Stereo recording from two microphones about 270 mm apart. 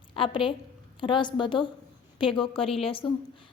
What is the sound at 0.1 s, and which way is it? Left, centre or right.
A woman's voice, centre.